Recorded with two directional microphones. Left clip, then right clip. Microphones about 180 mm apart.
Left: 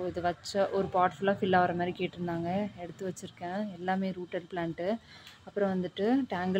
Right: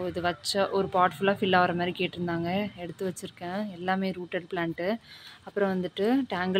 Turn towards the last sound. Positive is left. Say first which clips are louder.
# right 3 dB
turn(degrees=-10)  # may be behind; listen again after turning